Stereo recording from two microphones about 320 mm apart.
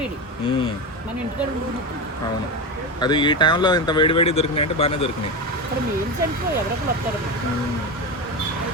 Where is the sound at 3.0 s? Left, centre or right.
Centre.